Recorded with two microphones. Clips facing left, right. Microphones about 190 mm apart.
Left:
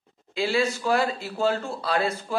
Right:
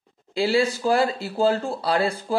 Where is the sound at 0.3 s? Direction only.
35° right (ahead or behind).